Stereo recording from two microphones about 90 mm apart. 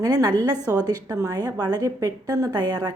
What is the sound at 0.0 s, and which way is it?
A woman's voice, 40° right (ahead or behind).